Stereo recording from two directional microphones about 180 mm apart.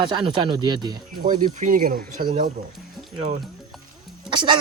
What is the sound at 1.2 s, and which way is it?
Speech, 45° right (ahead or behind).